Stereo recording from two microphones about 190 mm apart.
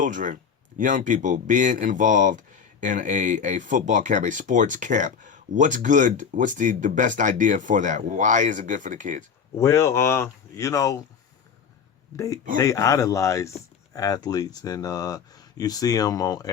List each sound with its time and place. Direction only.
0.0 s speech: 45° right (ahead or behind)
9.6 s speech: 15° left (ahead or behind)
12.1 s speech: 15° left (ahead or behind)